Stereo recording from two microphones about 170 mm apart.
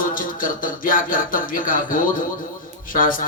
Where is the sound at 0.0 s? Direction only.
55° left (ahead or behind).